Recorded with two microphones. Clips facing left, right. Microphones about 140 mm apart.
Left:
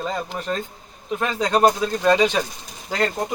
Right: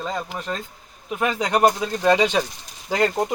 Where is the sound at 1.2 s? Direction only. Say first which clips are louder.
Even; 10° right (ahead or behind).